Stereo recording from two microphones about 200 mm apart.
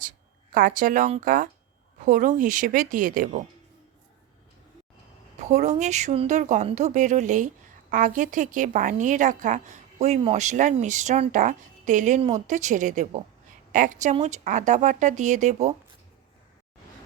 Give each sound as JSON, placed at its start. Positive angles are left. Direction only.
{"t": 0.5, "sound": "a woman's voice", "side_deg": -45}
{"t": 5.4, "sound": "a woman's voice", "side_deg": -35}